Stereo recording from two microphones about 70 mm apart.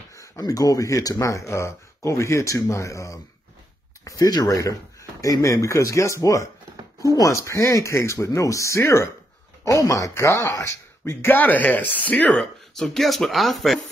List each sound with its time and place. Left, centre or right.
0.1 s speech: left
4.3 s speech: left
9.7 s speech: left; by 13.7 s centre